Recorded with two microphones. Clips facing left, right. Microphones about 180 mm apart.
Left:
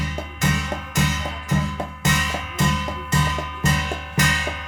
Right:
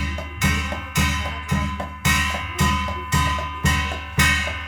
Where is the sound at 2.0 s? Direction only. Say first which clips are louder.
Left 2 dB; 40° left (ahead or behind).